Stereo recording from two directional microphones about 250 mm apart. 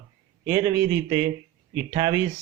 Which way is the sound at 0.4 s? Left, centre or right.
Centre.